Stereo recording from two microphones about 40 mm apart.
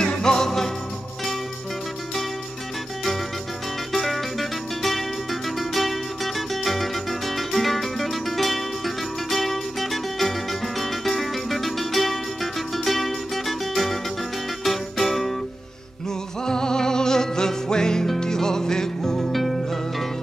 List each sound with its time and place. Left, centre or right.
0.0 s music: centre
3.9 s music: centre
16.4 s music: centre
19.3 s music: centre